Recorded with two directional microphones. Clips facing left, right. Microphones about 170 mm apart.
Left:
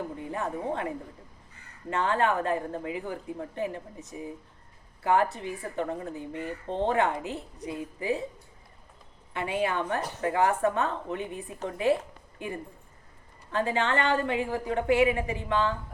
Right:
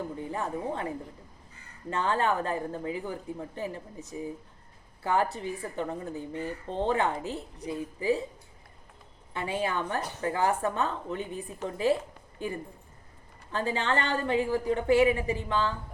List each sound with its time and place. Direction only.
0.2 s speech: 35° right (ahead or behind)
1.9 s speech: 35° right (ahead or behind)
9.3 s speech: 30° right (ahead or behind)
13.5 s speech: 35° right (ahead or behind)